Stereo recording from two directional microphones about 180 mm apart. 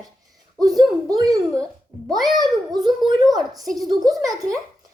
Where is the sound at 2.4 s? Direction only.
25° right (ahead or behind).